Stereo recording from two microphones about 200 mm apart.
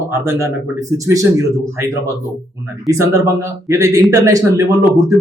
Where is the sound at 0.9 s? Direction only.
15° right (ahead or behind).